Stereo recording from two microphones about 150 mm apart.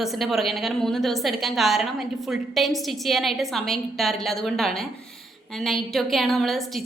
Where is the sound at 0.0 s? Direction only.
Centre (ahead or behind).